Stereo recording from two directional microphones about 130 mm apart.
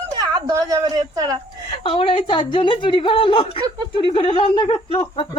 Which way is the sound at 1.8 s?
45° left (ahead or behind).